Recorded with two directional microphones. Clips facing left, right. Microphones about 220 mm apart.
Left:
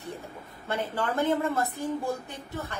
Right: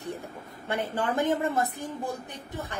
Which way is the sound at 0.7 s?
15° right (ahead or behind).